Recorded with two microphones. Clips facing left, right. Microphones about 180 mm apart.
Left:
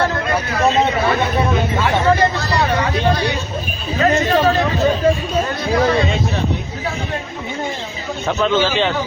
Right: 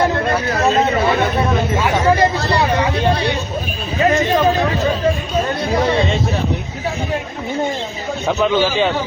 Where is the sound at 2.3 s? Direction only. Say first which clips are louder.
Right 3 dB; 35° right (ahead or behind).